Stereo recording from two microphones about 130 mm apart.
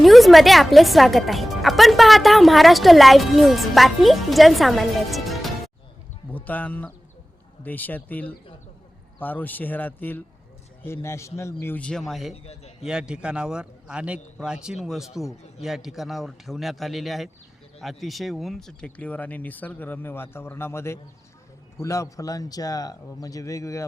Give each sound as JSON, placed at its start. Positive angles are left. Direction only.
{"t": 0.0, "sound": "speech", "side_deg": 0}
{"t": 5.1, "sound": "music", "side_deg": 0}
{"t": 6.3, "sound": "speech", "side_deg": 10}
{"t": 11.6, "sound": "speech", "side_deg": 10}
{"t": 12.3, "sound": "a man's voice", "side_deg": 55}
{"t": 12.8, "sound": "a man's voice", "side_deg": -5}